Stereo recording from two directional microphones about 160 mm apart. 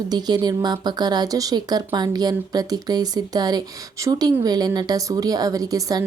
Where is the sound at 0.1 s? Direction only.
25° right (ahead or behind).